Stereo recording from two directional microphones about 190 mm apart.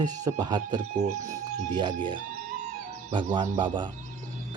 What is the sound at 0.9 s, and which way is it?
Speech, 40° right (ahead or behind).